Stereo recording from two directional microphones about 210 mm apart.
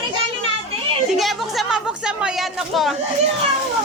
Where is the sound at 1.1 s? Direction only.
Centre (ahead or behind).